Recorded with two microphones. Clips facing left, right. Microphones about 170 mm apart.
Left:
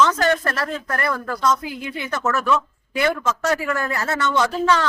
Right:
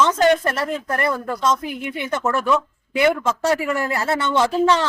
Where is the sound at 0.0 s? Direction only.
20° right (ahead or behind).